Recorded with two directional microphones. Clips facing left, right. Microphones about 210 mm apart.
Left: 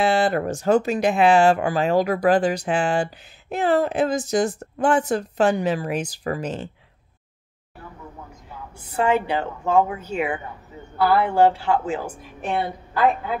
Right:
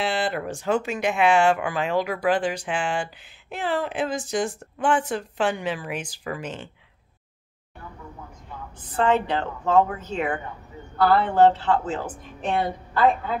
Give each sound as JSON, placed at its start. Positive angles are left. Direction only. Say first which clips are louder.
{"t": 0.0, "sound": "speech", "louder": "left 6 dB", "side_deg": 45}
{"t": 8.8, "sound": "a woman's voice", "louder": "left 1 dB", "side_deg": 10}